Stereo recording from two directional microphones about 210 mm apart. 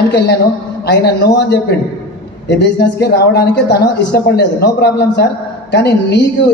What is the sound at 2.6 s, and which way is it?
Speech, 50° left (ahead or behind).